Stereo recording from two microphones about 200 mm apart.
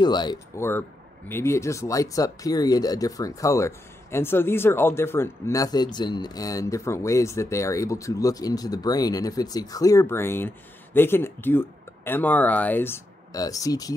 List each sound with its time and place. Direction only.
0.0 s speech: 20° left (ahead or behind)